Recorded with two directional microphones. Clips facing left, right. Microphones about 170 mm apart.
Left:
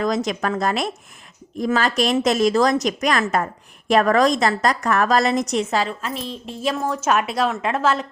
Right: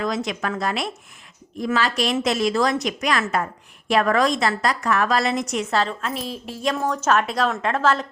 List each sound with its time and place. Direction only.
0.0 s a woman's voice: 40° left (ahead or behind)
6.0 s a woman's voice: centre (ahead or behind)